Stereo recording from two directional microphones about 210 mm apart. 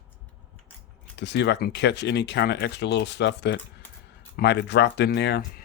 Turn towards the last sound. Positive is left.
turn(degrees=50)  # may be behind; listen again after turning